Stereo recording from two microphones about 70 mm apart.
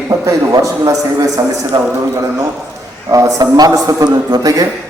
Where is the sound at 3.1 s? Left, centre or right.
Right.